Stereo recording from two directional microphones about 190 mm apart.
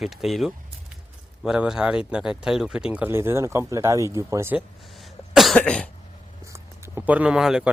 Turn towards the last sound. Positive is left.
turn(degrees=-5)  # may be behind; listen again after turning